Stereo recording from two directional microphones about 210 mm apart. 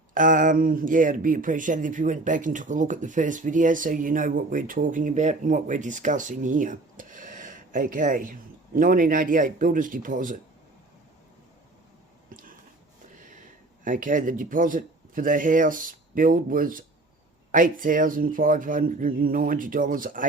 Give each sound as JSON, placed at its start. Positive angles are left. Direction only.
{"t": 0.1, "sound": "speech", "side_deg": -40}
{"t": 12.3, "sound": "a sound", "side_deg": -40}
{"t": 13.8, "sound": "speech", "side_deg": -40}